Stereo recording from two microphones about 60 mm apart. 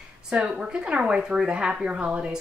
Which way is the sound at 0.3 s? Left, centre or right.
Centre.